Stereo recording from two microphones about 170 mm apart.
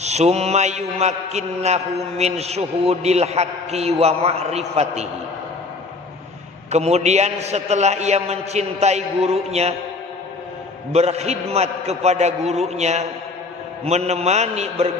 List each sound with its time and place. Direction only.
0.0 s mantra: 40° right (ahead or behind)
6.7 s mantra: 40° right (ahead or behind)
10.9 s mantra: 40° right (ahead or behind)